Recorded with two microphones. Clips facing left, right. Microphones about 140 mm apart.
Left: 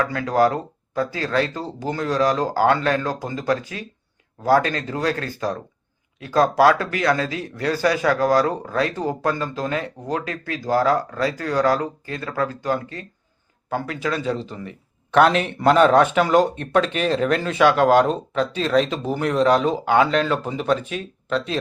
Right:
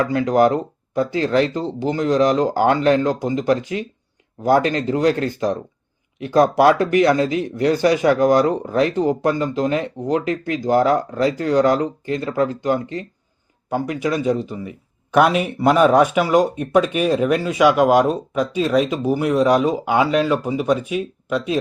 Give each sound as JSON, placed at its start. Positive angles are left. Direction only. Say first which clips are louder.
{"t": 0.0, "sound": "a man's voice", "louder": "right 3 dB", "side_deg": -20}